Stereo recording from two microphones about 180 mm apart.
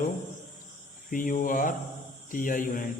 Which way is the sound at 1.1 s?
50° left (ahead or behind).